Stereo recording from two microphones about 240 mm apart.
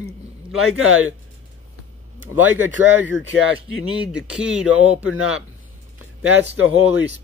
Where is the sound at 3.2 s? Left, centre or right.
Left.